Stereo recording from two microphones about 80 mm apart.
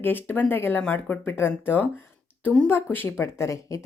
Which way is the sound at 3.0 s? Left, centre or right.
Left.